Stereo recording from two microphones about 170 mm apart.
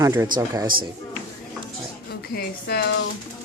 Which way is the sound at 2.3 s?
65° left (ahead or behind).